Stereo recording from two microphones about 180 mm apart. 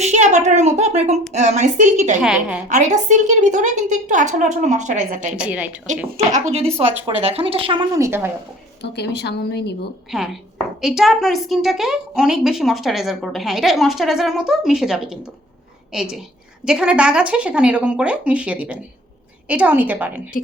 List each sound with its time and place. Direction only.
0.0 s a woman's voice: 40° right (ahead or behind)
2.2 s a woman's voice: 5° right (ahead or behind)
2.6 s a woman's voice: 40° right (ahead or behind)
5.4 s speech: 5° right (ahead or behind)
6.3 s a woman's voice: 35° right (ahead or behind)
7.9 s speech: 15° right (ahead or behind)
9.0 s a woman's voice: 70° left (ahead or behind)
10.1 s a woman's voice: centre (ahead or behind)